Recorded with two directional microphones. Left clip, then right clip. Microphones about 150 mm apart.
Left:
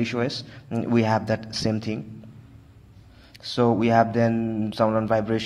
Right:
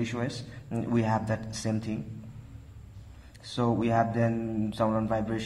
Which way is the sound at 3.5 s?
35° left (ahead or behind).